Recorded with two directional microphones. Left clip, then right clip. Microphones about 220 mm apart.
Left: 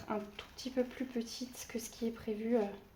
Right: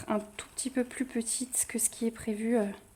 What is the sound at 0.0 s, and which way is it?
Speech, 45° right (ahead or behind).